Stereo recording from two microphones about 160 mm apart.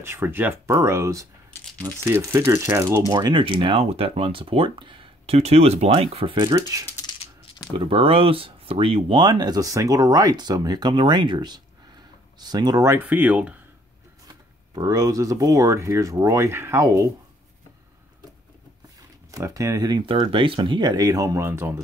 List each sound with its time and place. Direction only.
0.0 s speech: 15° right (ahead or behind)
1.5 s coin: 10° left (ahead or behind)
2.0 s speech: 15° right (ahead or behind)
7.1 s coin: 25° left (ahead or behind)
7.7 s speech: 35° right (ahead or behind); by 13.6 s 10° right (ahead or behind)
14.8 s speech: 20° right (ahead or behind)
19.3 s speech: 20° right (ahead or behind)